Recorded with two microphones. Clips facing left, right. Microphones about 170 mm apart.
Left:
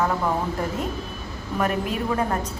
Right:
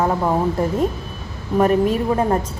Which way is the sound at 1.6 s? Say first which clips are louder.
Right 9 dB; 30° right (ahead or behind).